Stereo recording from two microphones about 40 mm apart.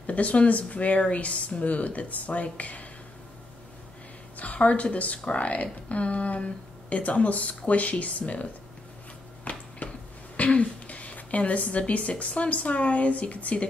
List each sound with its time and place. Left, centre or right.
0.0 s speech: left
4.6 s speech: left
9.4 s a sound: left
10.3 s speech: left